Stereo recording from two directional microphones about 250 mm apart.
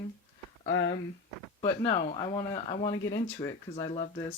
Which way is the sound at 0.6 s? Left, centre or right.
Left.